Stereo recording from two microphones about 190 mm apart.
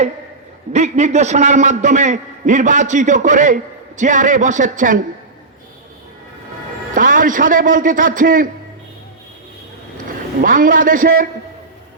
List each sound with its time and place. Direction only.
0.7 s a man's voice: 40° right (ahead or behind)
6.9 s a man's voice: 45° right (ahead or behind)
10.4 s a man's voice: 45° right (ahead or behind)